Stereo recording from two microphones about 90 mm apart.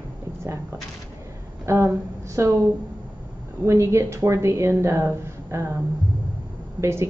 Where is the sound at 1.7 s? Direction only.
35° right (ahead or behind).